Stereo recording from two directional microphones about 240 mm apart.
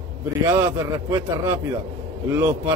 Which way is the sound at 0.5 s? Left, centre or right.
Centre.